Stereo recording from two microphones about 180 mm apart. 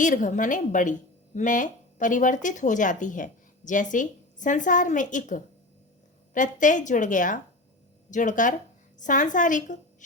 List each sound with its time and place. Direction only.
0.0 s speech: 45° left (ahead or behind)